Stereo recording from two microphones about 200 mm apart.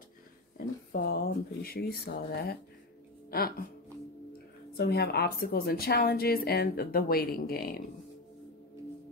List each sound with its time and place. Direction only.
0.6 s speech: 50° left (ahead or behind)
4.7 s speech: 55° left (ahead or behind)